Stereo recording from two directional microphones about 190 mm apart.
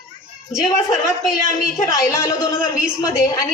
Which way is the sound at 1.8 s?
15° left (ahead or behind).